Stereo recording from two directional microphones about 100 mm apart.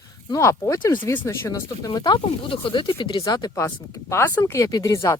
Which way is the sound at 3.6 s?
30° left (ahead or behind).